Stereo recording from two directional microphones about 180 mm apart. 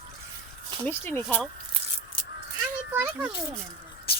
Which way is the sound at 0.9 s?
10° left (ahead or behind).